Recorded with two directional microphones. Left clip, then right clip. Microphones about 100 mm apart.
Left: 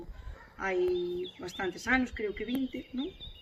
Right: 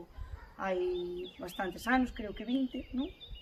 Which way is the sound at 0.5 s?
45° right (ahead or behind).